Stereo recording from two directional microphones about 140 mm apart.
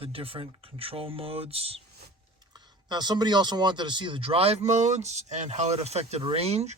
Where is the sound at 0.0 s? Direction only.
40° right (ahead or behind).